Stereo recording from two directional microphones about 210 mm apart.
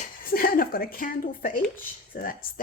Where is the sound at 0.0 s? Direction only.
45° left (ahead or behind).